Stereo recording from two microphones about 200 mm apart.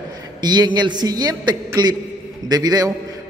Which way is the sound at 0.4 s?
20° right (ahead or behind).